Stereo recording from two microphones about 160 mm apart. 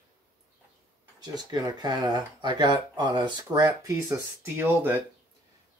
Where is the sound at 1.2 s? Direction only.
25° right (ahead or behind).